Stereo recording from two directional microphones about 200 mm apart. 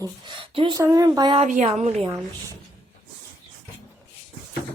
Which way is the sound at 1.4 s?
35° right (ahead or behind).